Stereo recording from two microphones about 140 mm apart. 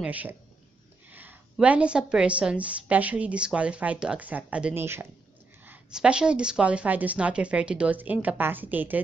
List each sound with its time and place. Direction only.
0.0 s a woman's voice: 10° right (ahead or behind)
5.7 s a woman's voice: 5° right (ahead or behind)